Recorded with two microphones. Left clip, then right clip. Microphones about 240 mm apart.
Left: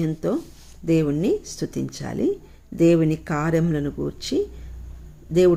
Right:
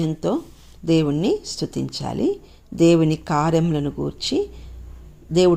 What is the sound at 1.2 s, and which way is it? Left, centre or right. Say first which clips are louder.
Speech: right 1 dB; centre.